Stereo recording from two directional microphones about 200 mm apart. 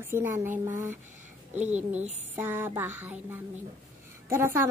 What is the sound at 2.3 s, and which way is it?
A woman's voice, 10° right (ahead or behind).